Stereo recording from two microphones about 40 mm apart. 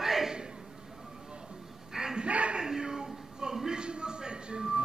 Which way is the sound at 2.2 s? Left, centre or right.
Right.